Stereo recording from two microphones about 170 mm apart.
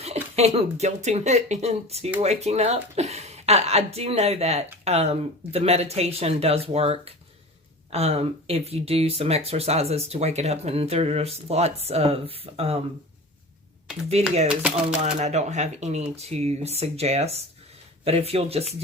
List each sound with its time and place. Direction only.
0.3 s speech: 40° right (ahead or behind)
14.1 s speech: 40° right (ahead or behind)
14.5 s speech: 5° right (ahead or behind)
15.0 s speech: 40° right (ahead or behind)